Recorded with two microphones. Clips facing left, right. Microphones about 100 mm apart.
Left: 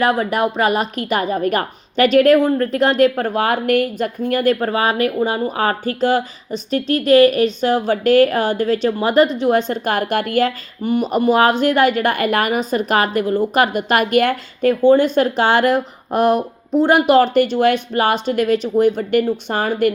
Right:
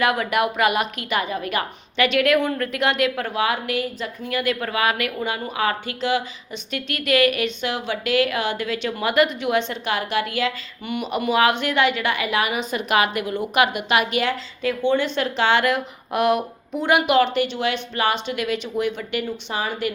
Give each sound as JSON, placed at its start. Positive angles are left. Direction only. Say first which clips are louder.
{"t": 0.0, "sound": "a woman's voice", "louder": "left 4 dB", "side_deg": 35}